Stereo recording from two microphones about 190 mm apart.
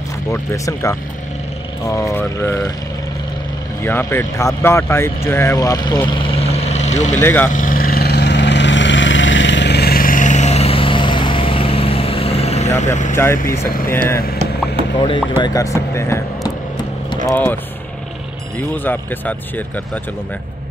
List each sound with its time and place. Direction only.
0.3 s speech: 15° left (ahead or behind)
3.8 s speech: 10° left (ahead or behind)
6.0 s vehicle: 30° left (ahead or behind)
7.2 s speech: 10° left (ahead or behind)
7.4 s vehicle: 45° left (ahead or behind)
13.1 s speech: 15° left (ahead or behind)
15.0 s speech: 25° left (ahead or behind)
18.9 s speech: 10° left (ahead or behind)